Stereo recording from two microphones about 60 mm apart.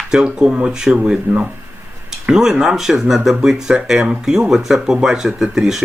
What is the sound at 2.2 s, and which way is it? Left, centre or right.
Speech, centre.